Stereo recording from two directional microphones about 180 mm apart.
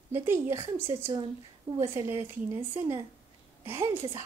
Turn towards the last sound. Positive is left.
turn(degrees=-15)  # may be behind; listen again after turning